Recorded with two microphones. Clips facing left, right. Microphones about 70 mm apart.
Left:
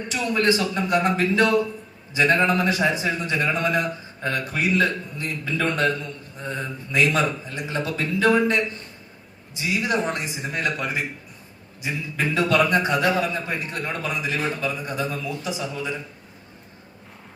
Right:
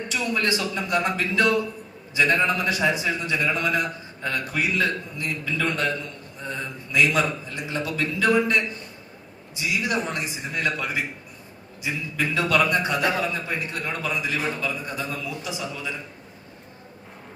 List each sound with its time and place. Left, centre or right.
0.1 s a man's voice: left